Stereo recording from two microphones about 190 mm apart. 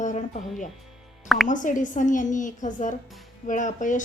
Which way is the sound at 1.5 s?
45° left (ahead or behind).